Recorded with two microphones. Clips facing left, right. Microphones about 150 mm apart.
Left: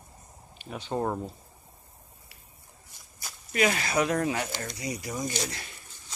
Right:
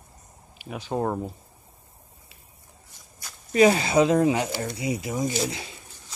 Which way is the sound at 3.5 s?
30° right (ahead or behind).